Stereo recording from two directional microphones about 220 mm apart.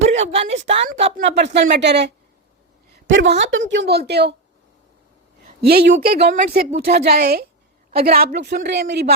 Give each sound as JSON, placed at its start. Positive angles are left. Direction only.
{"t": 0.0, "sound": "a woman's voice", "side_deg": -30}
{"t": 1.2, "sound": "a woman's voice", "side_deg": -50}
{"t": 5.6, "sound": "a woman's voice", "side_deg": -45}